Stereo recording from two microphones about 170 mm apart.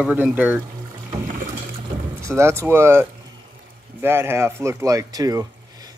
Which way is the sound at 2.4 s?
15° right (ahead or behind).